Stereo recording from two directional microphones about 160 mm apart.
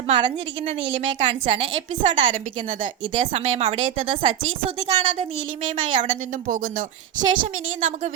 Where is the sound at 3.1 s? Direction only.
40° right (ahead or behind).